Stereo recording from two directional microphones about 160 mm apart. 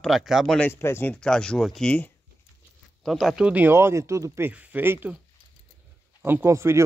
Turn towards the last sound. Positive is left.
turn(degrees=-15)  # may be behind; listen again after turning